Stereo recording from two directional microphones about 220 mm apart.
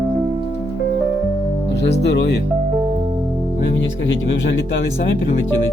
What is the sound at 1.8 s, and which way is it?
Speech, 50° left (ahead or behind).